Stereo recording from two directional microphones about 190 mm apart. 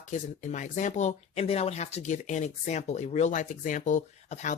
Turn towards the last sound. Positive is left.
turn(degrees=40)  # may be behind; listen again after turning